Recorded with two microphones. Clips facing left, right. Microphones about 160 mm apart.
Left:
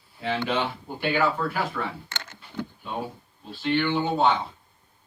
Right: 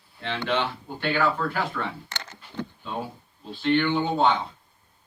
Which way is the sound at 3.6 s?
5° left (ahead or behind).